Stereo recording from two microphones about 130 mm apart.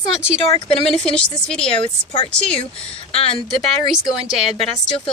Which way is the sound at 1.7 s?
45° left (ahead or behind).